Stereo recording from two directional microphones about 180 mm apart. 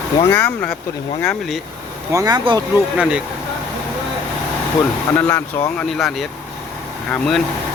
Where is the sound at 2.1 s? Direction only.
20° right (ahead or behind).